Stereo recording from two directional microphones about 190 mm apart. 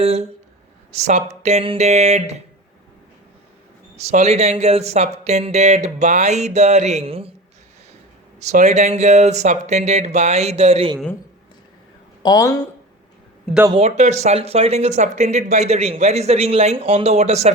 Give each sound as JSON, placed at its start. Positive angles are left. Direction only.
{"t": 0.0, "sound": "speech", "side_deg": -35}
{"t": 3.9, "sound": "speech", "side_deg": -35}
{"t": 8.4, "sound": "speech", "side_deg": -35}
{"t": 12.2, "sound": "speech", "side_deg": 20}
{"t": 13.7, "sound": "speech", "side_deg": -30}